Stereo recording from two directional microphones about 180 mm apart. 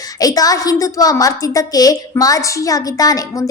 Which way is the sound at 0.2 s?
20° left (ahead or behind).